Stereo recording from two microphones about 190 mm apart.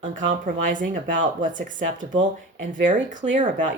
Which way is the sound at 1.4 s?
45° right (ahead or behind).